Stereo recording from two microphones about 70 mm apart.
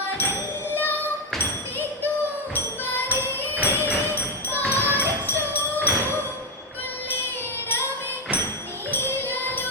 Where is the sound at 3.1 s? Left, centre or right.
Right.